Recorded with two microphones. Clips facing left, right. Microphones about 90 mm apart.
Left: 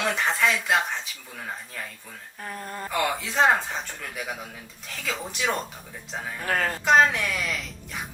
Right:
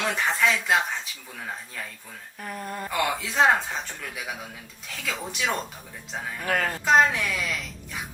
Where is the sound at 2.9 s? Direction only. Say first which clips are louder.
Even; centre (ahead or behind).